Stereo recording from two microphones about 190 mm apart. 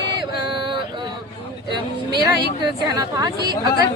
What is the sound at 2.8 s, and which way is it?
Speech, 20° right (ahead or behind).